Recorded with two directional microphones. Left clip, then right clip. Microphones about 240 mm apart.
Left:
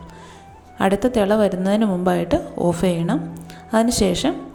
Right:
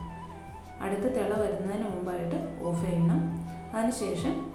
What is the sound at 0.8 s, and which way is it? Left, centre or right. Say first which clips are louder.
A woman's voice: left 12 dB; left.